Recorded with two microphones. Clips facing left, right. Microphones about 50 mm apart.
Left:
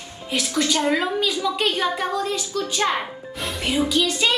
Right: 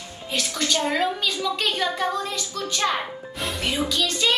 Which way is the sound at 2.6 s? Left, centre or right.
Left.